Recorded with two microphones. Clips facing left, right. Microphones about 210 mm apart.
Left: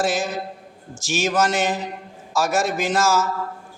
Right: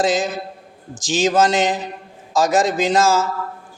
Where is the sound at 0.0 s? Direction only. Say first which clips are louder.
Right 4 dB; 20° right (ahead or behind).